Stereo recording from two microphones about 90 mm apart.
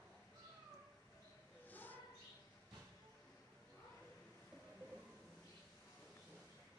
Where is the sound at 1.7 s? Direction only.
20° left (ahead or behind).